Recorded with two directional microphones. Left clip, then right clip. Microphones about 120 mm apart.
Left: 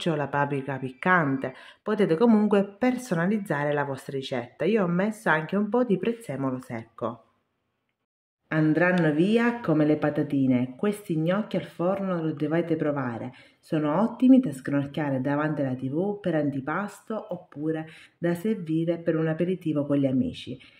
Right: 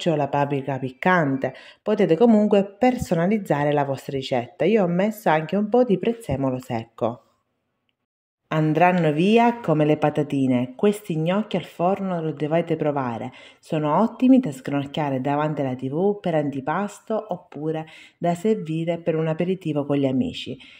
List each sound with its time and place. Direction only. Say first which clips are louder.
0.0 s speech: right 5 dB; 15° right (ahead or behind)
2.8 s speech: right 6 dB; 25° right (ahead or behind)
8.5 s speech: right 4 dB; 50° right (ahead or behind)